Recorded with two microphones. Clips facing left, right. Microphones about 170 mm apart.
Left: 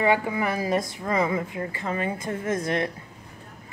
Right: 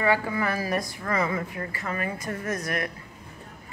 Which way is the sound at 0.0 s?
20° left (ahead or behind).